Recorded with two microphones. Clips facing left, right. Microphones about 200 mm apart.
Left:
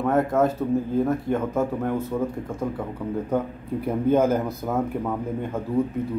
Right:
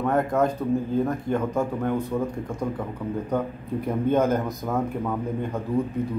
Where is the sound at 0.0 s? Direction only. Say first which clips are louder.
Left 2 dB; 5° left (ahead or behind).